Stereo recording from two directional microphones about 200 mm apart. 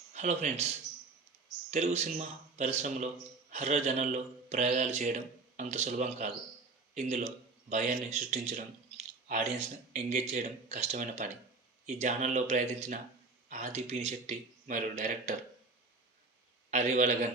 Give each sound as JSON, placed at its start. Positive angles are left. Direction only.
{"t": 0.1, "sound": "a man's voice", "side_deg": -35}
{"t": 1.7, "sound": "a man's voice", "side_deg": -35}
{"t": 16.7, "sound": "a man's voice", "side_deg": -35}